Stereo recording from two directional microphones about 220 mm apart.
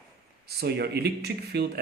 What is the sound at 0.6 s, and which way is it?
Speech, 45° right (ahead or behind).